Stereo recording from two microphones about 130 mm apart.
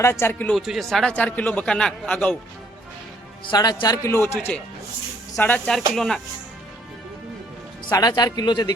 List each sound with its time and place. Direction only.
0.0 s a man's voice: 20° left (ahead or behind)
0.5 s speech: centre (ahead or behind)
3.5 s a man's voice: 30° left (ahead or behind)
4.5 s speech: 10° left (ahead or behind)
7.9 s speech: 25° left (ahead or behind)